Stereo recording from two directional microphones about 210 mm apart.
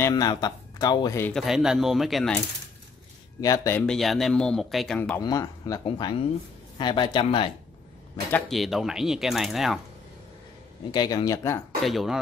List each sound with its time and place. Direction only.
0.0 s speech: 20° left (ahead or behind); by 2.4 s centre (ahead or behind)
3.3 s speech: 15° left (ahead or behind)
5.2 s speech: 15° left (ahead or behind)
8.3 s speech: 5° left (ahead or behind)
10.9 s speech: 20° left (ahead or behind)
11.8 s speech: centre (ahead or behind)